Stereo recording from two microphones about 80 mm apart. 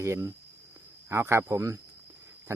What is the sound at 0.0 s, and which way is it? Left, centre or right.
Speech, right.